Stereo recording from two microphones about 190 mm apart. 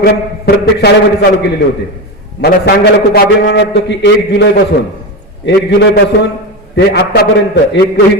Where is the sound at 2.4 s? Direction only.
55° left (ahead or behind).